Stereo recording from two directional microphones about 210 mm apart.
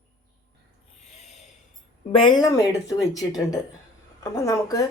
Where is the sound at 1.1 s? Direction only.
30° left (ahead or behind).